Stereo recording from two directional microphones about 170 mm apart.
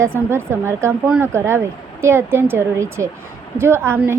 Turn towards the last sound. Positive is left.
turn(degrees=-15)  # may be behind; listen again after turning